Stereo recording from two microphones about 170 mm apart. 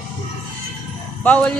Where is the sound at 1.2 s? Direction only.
10° left (ahead or behind).